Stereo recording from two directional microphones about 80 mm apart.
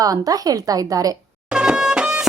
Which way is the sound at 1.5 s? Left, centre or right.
Centre.